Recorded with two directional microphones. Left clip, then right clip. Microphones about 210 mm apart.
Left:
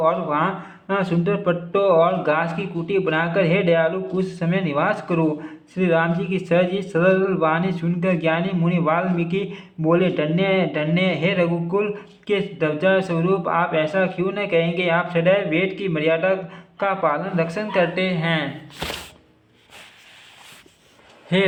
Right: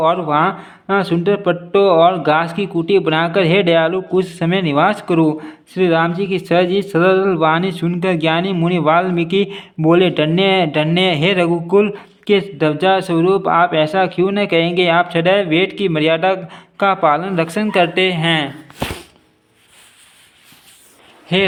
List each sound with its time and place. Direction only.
0.0 s speech: 45° right (ahead or behind)
21.3 s a man's voice: 30° right (ahead or behind)